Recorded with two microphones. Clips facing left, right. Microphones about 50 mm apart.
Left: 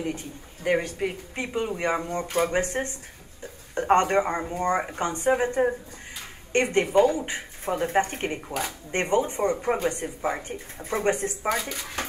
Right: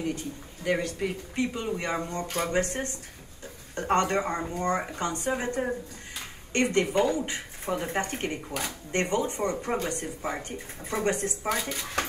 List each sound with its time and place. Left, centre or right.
0.7 s speech: left
2.2 s speech: centre
2.5 s speech: left
11.4 s speech: centre